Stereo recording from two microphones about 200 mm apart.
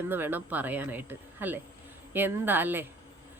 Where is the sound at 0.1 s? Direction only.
10° right (ahead or behind).